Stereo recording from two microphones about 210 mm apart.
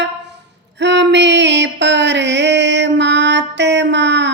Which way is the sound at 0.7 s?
55° right (ahead or behind).